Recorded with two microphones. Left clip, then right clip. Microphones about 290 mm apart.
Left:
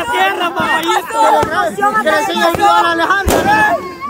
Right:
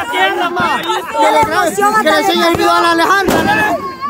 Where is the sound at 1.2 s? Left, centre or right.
Right.